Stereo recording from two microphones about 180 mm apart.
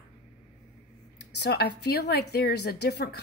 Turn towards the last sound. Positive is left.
turn(degrees=65)  # may be behind; listen again after turning